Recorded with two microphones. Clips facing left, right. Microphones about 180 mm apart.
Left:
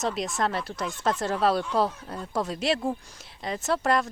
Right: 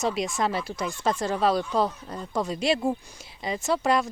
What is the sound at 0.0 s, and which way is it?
Speech, centre (ahead or behind).